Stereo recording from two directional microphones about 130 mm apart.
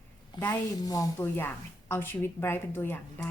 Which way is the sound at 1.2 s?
15° left (ahead or behind).